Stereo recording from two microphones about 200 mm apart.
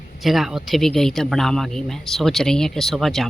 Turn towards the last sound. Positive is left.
turn(degrees=0)  # may be behind; listen again after turning